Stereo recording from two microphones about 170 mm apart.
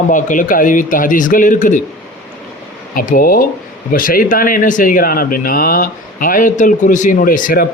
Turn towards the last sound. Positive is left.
turn(degrees=55)  # may be behind; listen again after turning